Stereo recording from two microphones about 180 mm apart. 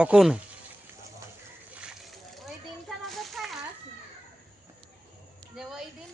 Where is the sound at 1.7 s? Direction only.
5° right (ahead or behind).